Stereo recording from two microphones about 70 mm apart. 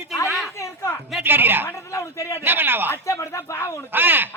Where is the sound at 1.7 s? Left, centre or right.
Left.